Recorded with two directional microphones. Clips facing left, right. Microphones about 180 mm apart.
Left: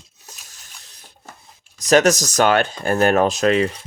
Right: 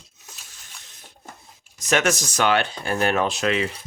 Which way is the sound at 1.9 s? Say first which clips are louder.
Left 7 dB; 40° left (ahead or behind).